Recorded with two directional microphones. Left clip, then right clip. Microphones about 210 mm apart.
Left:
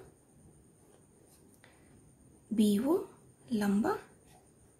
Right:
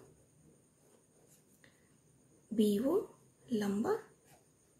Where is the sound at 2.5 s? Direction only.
45° left (ahead or behind).